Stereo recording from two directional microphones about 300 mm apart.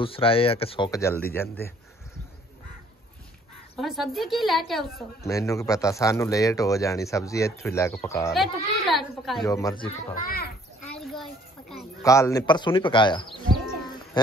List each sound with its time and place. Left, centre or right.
0.0 s a man's voice: centre
3.7 s a woman's voice: centre
9.5 s a man's voice: centre
10.2 s a child's voice: left
10.9 s children playing: centre
12.0 s a man's voice: centre
13.5 s bird: centre